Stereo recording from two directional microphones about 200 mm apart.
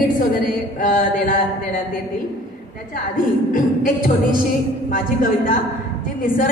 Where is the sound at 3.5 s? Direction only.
40° left (ahead or behind).